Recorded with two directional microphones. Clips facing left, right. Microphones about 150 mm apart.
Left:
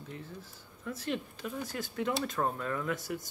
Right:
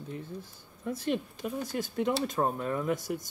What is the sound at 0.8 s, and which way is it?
Speech, 15° right (ahead or behind).